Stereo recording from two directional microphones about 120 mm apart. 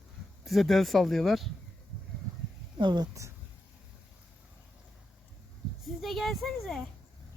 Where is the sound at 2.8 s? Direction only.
35° right (ahead or behind).